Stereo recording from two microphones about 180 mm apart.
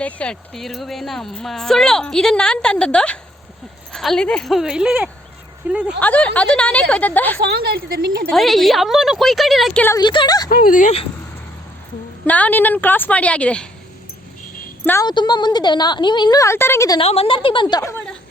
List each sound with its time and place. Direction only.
0.0 s speech: 5° left (ahead or behind); by 5.8 s 10° right (ahead or behind)
6.0 s a woman's voice: 10° left (ahead or behind)
7.3 s a woman's voice: 60° right (ahead or behind)
8.3 s speech: centre (ahead or behind)
10.0 s speech: 25° left (ahead or behind)
10.5 s speech: 50° left (ahead or behind)
12.2 s a woman's voice: 10° left (ahead or behind)
15.0 s speech: 25° left (ahead or behind)
17.0 s speech: 30° left (ahead or behind)